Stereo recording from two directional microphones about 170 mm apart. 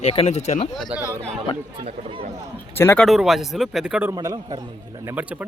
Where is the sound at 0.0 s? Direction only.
35° left (ahead or behind).